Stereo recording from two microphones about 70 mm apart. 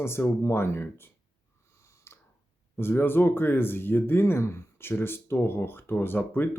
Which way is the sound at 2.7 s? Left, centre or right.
Left.